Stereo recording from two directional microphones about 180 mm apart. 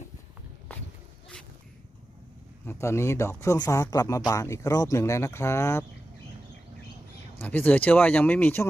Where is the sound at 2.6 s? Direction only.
15° left (ahead or behind).